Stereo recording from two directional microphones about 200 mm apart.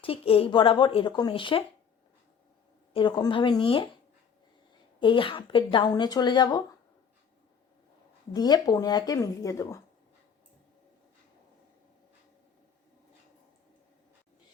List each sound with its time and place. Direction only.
0.0 s speech: 30° left (ahead or behind)
2.9 s speech: 25° left (ahead or behind)
4.9 s speech: 25° left (ahead or behind)
8.3 s speech: 20° left (ahead or behind)